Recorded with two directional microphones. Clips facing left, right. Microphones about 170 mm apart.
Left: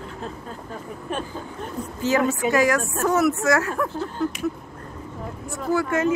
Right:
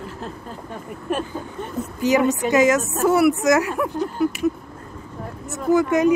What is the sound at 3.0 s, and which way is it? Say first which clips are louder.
Speech: right 4 dB; 10° right (ahead or behind).